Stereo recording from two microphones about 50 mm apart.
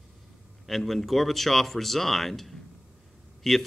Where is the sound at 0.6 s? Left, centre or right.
Centre.